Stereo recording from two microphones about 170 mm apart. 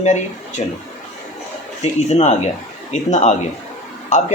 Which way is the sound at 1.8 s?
40° left (ahead or behind).